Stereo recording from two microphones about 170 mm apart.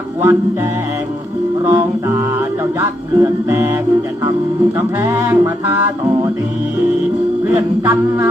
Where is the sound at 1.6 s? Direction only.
20° right (ahead or behind).